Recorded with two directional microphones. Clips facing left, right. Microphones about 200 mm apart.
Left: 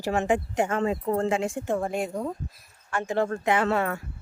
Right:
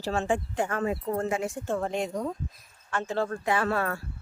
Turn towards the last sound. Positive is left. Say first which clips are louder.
# left 3 dB
turn(degrees=20)  # may be behind; listen again after turning